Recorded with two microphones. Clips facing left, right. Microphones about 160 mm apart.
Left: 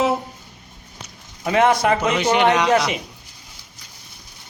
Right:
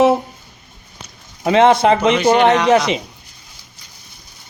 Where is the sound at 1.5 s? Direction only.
25° right (ahead or behind).